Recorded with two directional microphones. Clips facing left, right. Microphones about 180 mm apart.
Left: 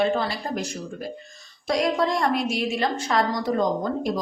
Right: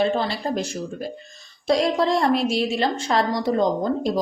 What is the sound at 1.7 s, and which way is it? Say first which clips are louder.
A woman's voice: right 3 dB; 30° right (ahead or behind).